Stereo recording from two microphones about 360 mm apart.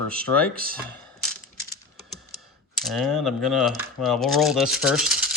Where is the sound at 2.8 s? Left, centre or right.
Centre.